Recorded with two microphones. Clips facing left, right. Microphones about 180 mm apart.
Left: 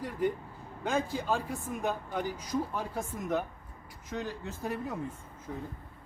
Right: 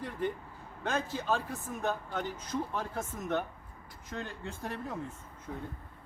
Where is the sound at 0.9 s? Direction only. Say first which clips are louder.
Left 2 dB; 10° left (ahead or behind).